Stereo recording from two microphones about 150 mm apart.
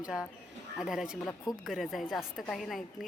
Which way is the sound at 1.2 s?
25° left (ahead or behind).